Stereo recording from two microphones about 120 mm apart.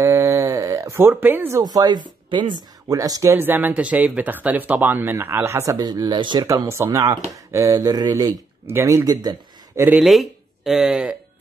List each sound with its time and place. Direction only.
0.0 s a sound: 25° right (ahead or behind)
1.6 s speech: 35° right (ahead or behind)
2.9 s speech: 30° right (ahead or behind)
6.5 s speech: 20° right (ahead or behind)
9.9 s speech: centre (ahead or behind)